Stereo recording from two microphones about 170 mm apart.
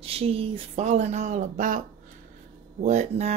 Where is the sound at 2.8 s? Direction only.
40° right (ahead or behind).